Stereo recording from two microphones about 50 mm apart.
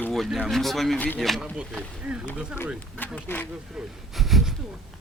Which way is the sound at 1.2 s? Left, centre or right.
Centre.